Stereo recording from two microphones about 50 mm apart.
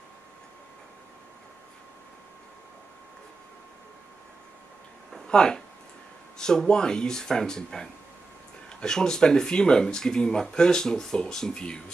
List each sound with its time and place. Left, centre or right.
5.3 s speech: centre